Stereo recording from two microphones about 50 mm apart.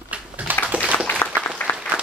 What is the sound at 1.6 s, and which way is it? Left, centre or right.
Applause, left.